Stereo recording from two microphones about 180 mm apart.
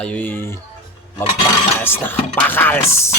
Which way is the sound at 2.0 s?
10° left (ahead or behind).